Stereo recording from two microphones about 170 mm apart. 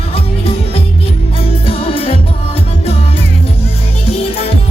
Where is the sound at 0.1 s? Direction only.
35° left (ahead or behind).